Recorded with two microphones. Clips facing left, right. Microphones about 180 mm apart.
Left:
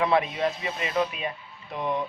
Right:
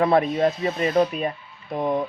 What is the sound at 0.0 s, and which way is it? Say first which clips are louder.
A man's voice: right 5 dB; 45° right (ahead or behind).